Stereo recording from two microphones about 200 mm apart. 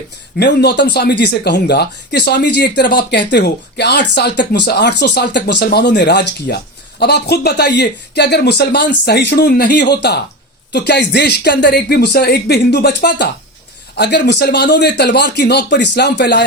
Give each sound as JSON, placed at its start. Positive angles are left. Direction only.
{"t": 0.3, "sound": "speech", "side_deg": 55}